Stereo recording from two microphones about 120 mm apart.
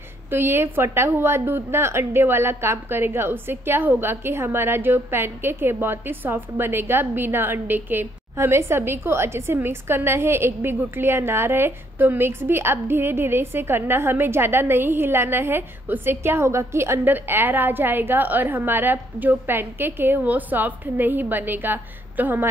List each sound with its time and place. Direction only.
0.3 s a woman's voice: 20° right (ahead or behind)